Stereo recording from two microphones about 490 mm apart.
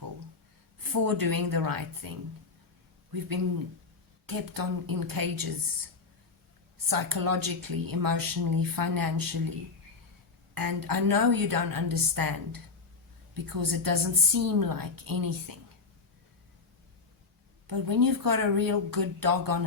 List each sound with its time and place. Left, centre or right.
0.8 s speech: right
6.8 s speech: right
10.5 s speech: right
17.7 s speech: right